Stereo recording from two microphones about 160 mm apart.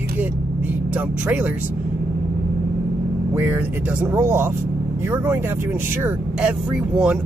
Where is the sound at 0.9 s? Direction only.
10° right (ahead or behind).